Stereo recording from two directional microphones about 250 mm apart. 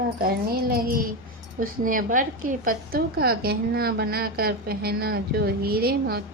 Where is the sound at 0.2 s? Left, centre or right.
Right.